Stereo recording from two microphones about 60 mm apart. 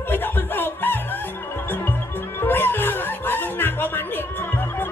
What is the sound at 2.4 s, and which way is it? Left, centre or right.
Music, left.